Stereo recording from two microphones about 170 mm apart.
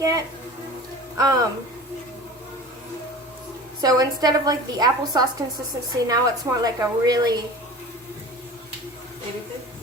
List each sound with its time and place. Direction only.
0.0 s a woman's voice: 20° right (ahead or behind)
3.8 s a woman's voice: 20° right (ahead or behind)